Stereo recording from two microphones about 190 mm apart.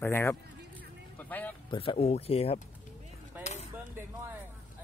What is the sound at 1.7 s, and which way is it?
Speech, 30° left (ahead or behind).